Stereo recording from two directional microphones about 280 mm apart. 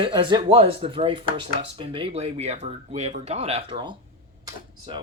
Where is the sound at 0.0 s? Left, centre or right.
Centre.